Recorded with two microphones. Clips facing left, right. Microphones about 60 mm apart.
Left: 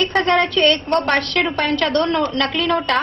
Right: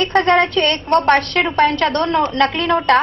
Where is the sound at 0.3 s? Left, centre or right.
Right.